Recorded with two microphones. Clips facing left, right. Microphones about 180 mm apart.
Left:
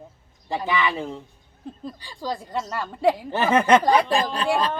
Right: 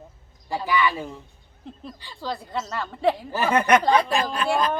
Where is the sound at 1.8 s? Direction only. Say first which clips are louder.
Left 2 dB; 15° left (ahead or behind).